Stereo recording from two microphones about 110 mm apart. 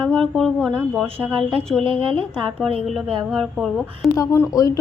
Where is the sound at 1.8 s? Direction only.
50° right (ahead or behind).